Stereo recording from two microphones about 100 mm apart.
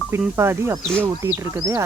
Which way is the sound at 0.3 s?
25° right (ahead or behind).